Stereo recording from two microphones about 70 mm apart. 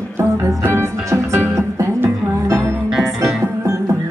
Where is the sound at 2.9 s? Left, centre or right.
Centre.